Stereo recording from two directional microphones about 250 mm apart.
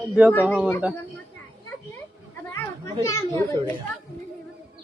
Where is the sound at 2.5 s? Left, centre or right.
Centre.